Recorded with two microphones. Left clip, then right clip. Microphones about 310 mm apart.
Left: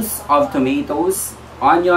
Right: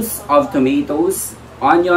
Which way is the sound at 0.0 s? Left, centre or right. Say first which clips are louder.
Right 1 dB; centre.